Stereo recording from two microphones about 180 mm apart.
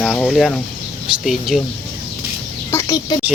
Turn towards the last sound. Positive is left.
turn(degrees=20)  # may be behind; listen again after turning